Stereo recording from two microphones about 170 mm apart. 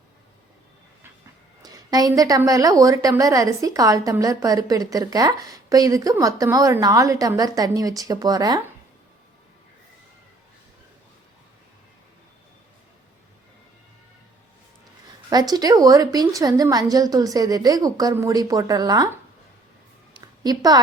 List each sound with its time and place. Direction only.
1.6 s a woman's voice: 20° right (ahead or behind)
15.3 s a woman's voice: 25° right (ahead or behind)
20.2 s a woman's voice: 25° right (ahead or behind)